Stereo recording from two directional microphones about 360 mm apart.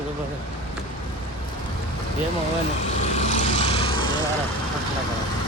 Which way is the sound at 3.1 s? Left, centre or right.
Centre.